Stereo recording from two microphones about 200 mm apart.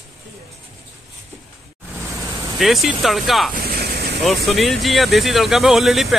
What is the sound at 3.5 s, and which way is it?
Vehicle, 50° right (ahead or behind).